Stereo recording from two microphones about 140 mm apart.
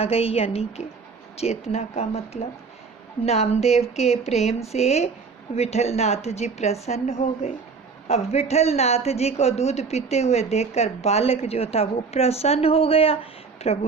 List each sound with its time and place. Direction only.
0.0 s a woman's voice: 45° left (ahead or behind)